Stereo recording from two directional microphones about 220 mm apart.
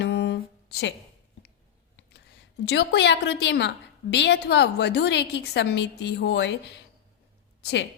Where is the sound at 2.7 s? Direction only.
50° left (ahead or behind).